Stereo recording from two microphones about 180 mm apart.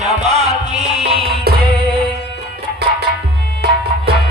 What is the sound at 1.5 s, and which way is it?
Music, 60° right (ahead or behind).